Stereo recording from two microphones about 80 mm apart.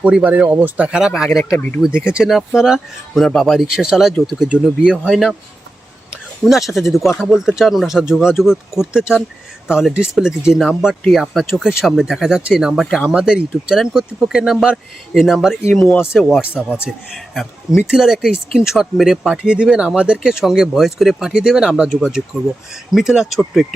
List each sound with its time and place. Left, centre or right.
0.0 s speech: centre
6.4 s speech: centre
16.6 s speech: centre
17.3 s speech: centre